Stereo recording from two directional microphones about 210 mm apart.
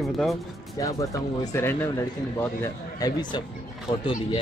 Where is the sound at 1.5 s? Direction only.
10° left (ahead or behind).